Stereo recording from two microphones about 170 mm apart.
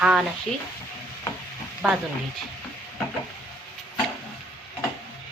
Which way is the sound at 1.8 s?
Centre (ahead or behind).